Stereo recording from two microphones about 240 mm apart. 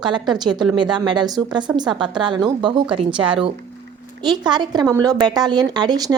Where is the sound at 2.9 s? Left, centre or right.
Right.